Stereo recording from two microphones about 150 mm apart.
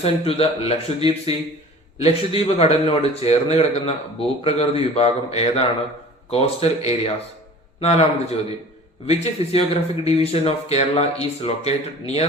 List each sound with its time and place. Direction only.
0.0 s a man's voice: 40° left (ahead or behind)